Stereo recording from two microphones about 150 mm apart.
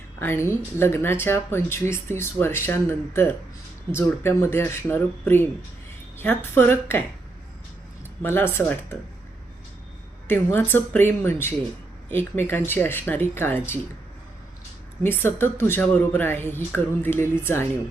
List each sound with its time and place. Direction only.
0.2 s a woman's voice: 15° left (ahead or behind)
8.2 s a woman's voice: 15° left (ahead or behind)
10.2 s a woman's voice: 15° left (ahead or behind)
15.0 s a woman's voice: 15° left (ahead or behind)